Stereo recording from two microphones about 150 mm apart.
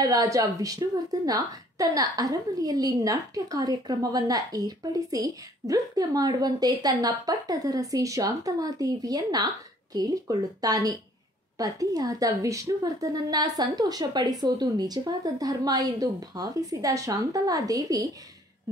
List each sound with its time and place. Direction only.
0.0 s a woman's voice: 25° right (ahead or behind)